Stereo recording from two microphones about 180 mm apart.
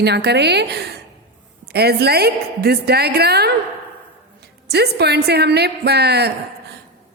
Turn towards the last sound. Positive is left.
turn(degrees=-65)  # may be behind; listen again after turning